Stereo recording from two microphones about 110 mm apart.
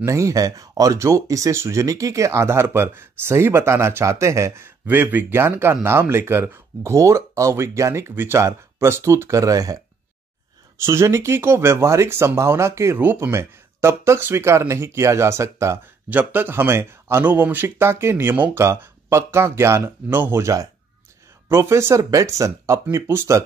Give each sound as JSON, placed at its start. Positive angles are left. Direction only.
{"t": 0.0, "sound": "speech", "side_deg": -30}
{"t": 10.9, "sound": "speech", "side_deg": -25}